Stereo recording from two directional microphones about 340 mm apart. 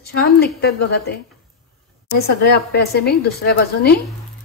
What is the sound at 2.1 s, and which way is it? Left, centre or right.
A woman's voice, left.